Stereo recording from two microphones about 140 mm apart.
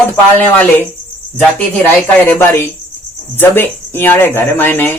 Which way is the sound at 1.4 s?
10° left (ahead or behind).